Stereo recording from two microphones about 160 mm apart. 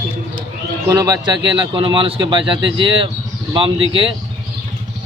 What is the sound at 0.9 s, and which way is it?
Speech, 25° right (ahead or behind).